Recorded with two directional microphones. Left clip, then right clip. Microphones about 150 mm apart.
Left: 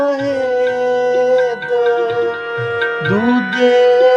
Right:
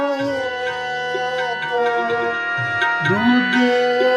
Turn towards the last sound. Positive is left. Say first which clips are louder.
# left 7 dB
turn(degrees=55)  # may be behind; listen again after turning